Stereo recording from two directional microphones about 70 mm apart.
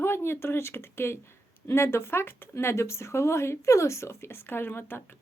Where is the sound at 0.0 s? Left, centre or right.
Left.